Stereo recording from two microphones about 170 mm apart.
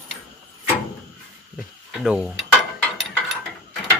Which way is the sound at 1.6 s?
5° right (ahead or behind).